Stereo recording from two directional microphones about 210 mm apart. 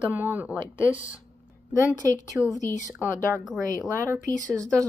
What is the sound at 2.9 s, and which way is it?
A woman's voice, 10° right (ahead or behind).